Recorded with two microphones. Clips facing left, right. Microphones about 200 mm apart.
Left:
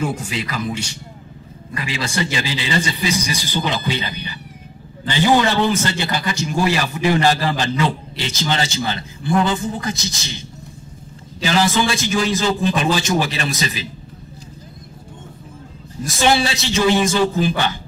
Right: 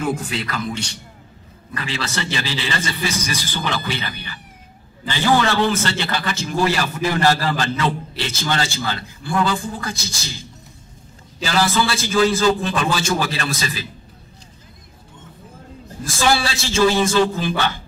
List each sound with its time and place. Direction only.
0.5 s a man's voice: 10° left (ahead or behind)
11.4 s a man's voice: 15° left (ahead or behind)
16.2 s a man's voice: 20° left (ahead or behind)